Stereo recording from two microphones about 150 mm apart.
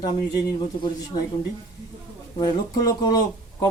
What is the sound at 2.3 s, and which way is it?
Speech, 25° left (ahead or behind).